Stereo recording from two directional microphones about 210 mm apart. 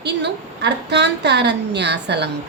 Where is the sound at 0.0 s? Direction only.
55° right (ahead or behind).